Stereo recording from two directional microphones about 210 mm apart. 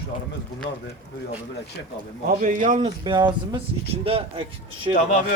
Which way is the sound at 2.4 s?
35° right (ahead or behind).